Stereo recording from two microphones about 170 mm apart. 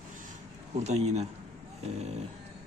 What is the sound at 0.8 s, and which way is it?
Speech, 40° right (ahead or behind).